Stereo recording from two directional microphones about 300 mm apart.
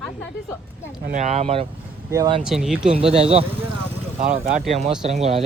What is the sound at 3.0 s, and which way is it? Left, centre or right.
Speech, centre.